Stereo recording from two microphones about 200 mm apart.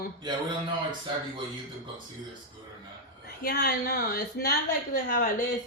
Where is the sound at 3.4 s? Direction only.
50° left (ahead or behind).